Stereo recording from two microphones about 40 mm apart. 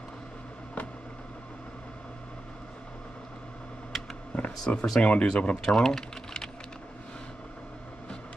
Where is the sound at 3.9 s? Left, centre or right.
Centre.